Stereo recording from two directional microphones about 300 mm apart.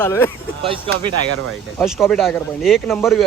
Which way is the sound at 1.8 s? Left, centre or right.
Centre.